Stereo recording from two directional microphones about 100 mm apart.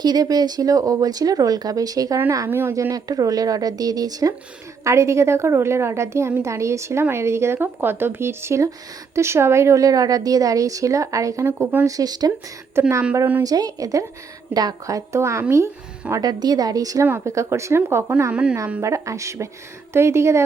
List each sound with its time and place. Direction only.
0.0 s a woman's voice: 40° right (ahead or behind)
2.5 s speech: 20° right (ahead or behind)
2.9 s a woman's voice: 40° right (ahead or behind)
4.8 s a woman's voice: 30° right (ahead or behind)
11.4 s speech: 20° right (ahead or behind)
11.9 s a woman's voice: 40° right (ahead or behind)
12.8 s speech: 25° right (ahead or behind)
13.4 s a woman's voice: 40° right (ahead or behind)
16.2 s a woman's voice: 40° right (ahead or behind)
17.1 s speech: 25° right (ahead or behind)
18.3 s speech: 10° right (ahead or behind)
18.8 s a woman's voice: 30° right (ahead or behind)